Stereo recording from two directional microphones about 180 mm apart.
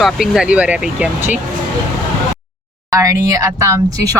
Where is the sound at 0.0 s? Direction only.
Centre (ahead or behind).